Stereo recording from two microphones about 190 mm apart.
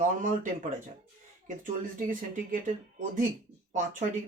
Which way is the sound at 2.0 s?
45° right (ahead or behind).